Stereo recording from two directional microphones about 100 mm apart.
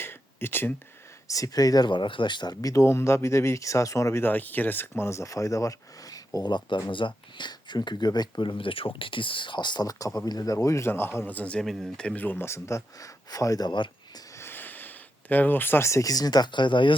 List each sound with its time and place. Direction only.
0.0 s a sound: 25° left (ahead or behind)
1.3 s speech: 35° left (ahead or behind)
4.2 s speech: 15° left (ahead or behind); by 13.9 s 50° left (ahead or behind)
14.3 s speech: 20° left (ahead or behind); by 17.0 s 55° left (ahead or behind)